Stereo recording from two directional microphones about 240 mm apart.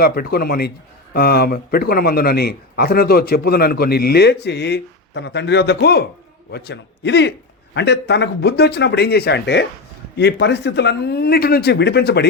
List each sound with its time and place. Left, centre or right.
0.0 s a man's voice: left